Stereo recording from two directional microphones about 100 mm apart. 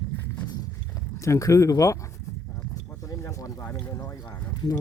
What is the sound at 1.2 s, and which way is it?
Speech, 30° left (ahead or behind).